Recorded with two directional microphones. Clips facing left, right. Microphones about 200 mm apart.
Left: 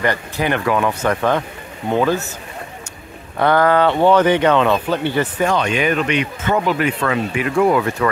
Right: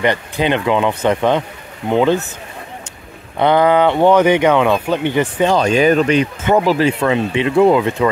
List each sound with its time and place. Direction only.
0.0 s speech: 20° right (ahead or behind)
3.3 s speech: 20° right (ahead or behind)
5.6 s speech: 35° right (ahead or behind)